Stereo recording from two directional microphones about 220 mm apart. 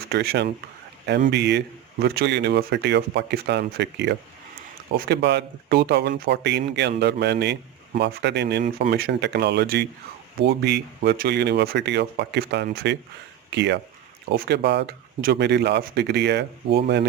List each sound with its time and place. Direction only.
0.1 s a man's voice: 45° right (ahead or behind)